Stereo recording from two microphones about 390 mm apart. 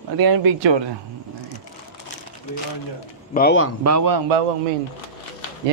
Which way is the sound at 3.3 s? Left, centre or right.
Left.